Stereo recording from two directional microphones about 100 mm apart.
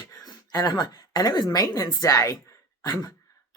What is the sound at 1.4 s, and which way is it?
Speech, 35° left (ahead or behind).